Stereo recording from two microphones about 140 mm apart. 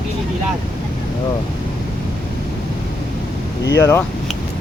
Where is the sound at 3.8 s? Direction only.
20° left (ahead or behind).